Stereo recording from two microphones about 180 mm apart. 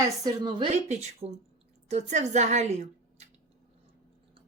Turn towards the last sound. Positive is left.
turn(degrees=-40)  # may be behind; listen again after turning